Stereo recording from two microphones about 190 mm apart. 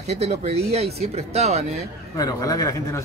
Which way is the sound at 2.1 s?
20° left (ahead or behind).